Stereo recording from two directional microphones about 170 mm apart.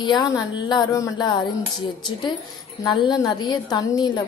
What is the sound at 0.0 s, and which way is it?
A woman's voice, 25° left (ahead or behind).